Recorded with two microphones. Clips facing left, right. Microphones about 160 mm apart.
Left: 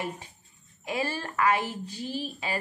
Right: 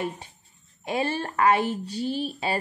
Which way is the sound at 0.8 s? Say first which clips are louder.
Right 4 dB; 30° right (ahead or behind).